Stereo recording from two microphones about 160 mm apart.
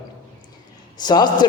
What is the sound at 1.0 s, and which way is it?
Speech, 25° left (ahead or behind).